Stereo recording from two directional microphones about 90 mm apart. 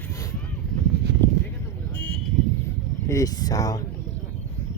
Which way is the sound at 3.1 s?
40° left (ahead or behind).